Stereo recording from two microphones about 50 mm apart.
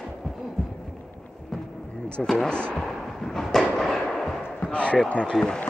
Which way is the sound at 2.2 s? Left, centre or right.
Centre.